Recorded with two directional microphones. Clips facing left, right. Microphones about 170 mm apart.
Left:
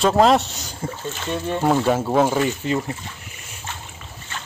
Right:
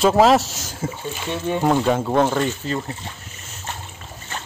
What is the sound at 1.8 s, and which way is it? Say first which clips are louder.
Speech: even; 5° left (ahead or behind).